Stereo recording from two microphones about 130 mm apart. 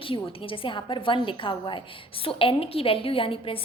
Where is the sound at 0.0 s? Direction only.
45° left (ahead or behind).